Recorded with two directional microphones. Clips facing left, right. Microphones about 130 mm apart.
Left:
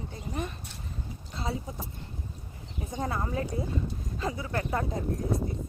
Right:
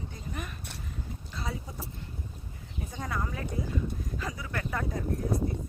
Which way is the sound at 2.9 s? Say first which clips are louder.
Left 4 dB; 25° left (ahead or behind).